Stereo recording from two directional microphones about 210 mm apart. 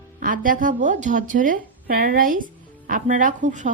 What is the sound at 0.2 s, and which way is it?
A woman's voice, 40° right (ahead or behind).